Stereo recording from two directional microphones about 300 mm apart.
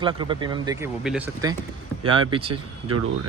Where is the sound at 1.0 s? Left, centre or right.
Centre.